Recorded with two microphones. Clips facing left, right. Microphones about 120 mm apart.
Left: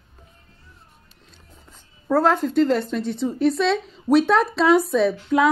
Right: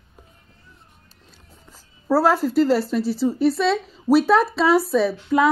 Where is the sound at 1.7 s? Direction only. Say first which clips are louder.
Right 1 dB; 5° right (ahead or behind).